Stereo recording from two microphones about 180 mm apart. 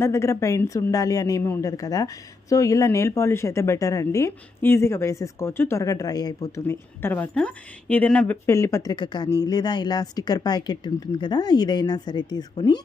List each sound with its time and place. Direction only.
0.0 s a woman's voice: 15° left (ahead or behind)